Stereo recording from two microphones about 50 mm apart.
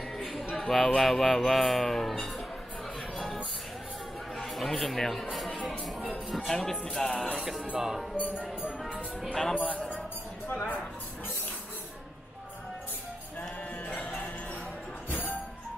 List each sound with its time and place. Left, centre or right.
0.2 s a sound: centre
0.6 s speech: centre
4.4 s speech: centre
6.0 s music: centre
7.3 s speech: centre
9.3 s speech: centre
10.5 s speech: left
13.8 s music: left
15.0 s music: left